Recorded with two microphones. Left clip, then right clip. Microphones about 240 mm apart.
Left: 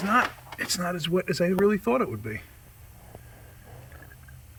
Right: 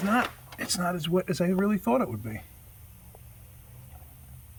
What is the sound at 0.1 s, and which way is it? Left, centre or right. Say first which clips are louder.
Speech: left 5 dB; centre.